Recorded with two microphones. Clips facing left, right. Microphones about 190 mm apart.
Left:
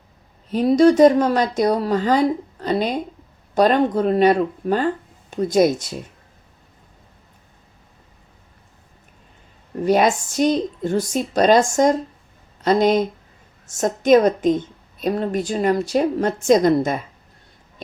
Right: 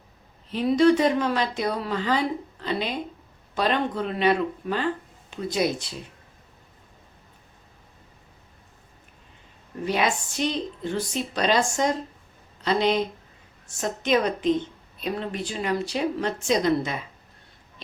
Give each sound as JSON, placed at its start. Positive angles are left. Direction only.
{"t": 0.5, "sound": "a woman's voice", "side_deg": 40}
{"t": 9.8, "sound": "a woman's voice", "side_deg": 45}